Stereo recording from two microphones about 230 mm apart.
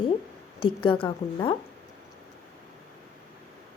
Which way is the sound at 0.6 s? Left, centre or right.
Left.